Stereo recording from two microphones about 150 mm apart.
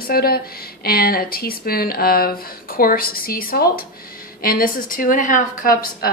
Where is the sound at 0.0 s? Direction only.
85° left.